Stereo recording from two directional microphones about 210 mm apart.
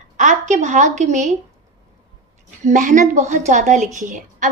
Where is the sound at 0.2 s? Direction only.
35° right (ahead or behind).